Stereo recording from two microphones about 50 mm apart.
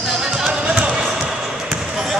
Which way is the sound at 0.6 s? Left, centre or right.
Right.